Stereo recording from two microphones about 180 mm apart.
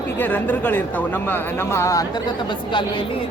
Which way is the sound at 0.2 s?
10° left (ahead or behind).